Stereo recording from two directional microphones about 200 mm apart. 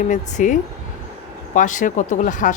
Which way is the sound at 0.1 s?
40° left (ahead or behind).